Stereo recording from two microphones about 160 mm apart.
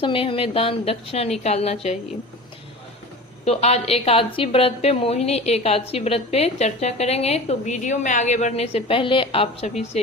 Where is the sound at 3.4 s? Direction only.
40° left (ahead or behind).